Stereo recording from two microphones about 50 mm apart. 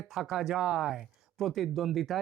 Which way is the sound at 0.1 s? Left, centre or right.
Centre.